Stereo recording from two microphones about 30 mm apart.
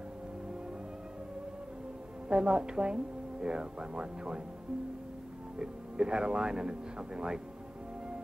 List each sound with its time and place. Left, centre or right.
2.2 s a woman's voice: right
5.6 s a woman's voice: right